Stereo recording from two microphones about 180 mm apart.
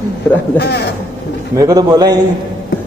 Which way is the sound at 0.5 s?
65° left (ahead or behind).